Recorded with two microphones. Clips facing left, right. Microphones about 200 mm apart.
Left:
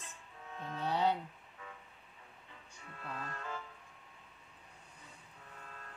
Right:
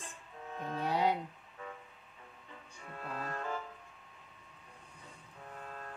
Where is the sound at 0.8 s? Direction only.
10° right (ahead or behind).